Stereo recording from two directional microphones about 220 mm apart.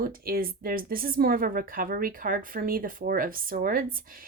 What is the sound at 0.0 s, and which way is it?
Speech, 40° right (ahead or behind).